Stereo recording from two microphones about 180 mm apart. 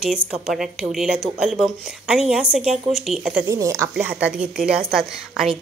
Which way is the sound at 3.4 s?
20° right (ahead or behind).